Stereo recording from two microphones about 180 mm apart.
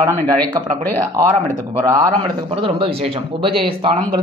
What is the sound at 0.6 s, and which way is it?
Speech, 20° right (ahead or behind).